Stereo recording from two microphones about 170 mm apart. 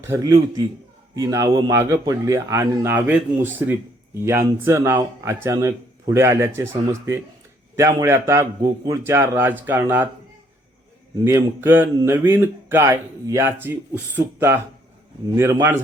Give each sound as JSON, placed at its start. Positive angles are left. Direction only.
{"t": 0.0, "sound": "a man's voice", "side_deg": -15}
{"t": 11.2, "sound": "speech", "side_deg": -15}